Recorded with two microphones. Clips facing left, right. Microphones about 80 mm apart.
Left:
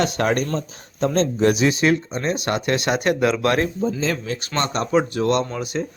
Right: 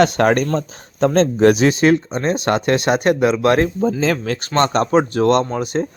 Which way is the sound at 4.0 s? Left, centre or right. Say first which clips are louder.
Right 5 dB; right.